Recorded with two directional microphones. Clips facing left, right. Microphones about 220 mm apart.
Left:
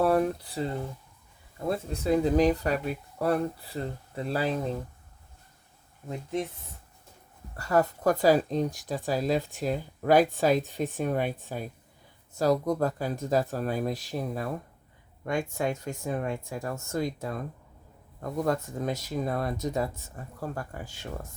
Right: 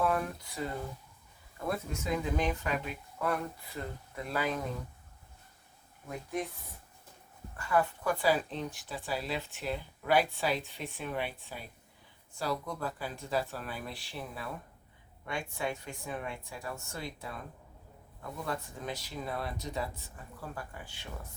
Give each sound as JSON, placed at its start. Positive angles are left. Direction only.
{"t": 0.0, "sound": "a sound", "side_deg": 35}
{"t": 1.5, "sound": "speech", "side_deg": 25}
{"t": 6.1, "sound": "speech", "side_deg": 25}
{"t": 7.5, "sound": "speech", "side_deg": 40}